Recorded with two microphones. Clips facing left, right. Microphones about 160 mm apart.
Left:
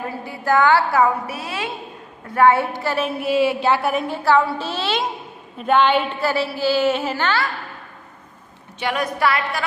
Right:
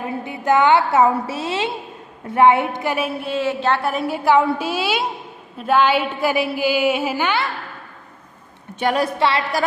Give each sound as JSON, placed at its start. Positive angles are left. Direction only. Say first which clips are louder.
{"t": 0.2, "sound": "a woman's voice", "louder": "right 1 dB", "side_deg": -20}
{"t": 3.2, "sound": "a woman's voice", "louder": "left 3 dB", "side_deg": 10}
{"t": 4.1, "sound": "a woman's voice", "louder": "right 3 dB", "side_deg": -15}
{"t": 8.7, "sound": "a woman's voice", "louder": "right 4 dB", "side_deg": -45}
{"t": 9.0, "sound": "a woman's voice", "louder": "right 1 dB", "side_deg": -30}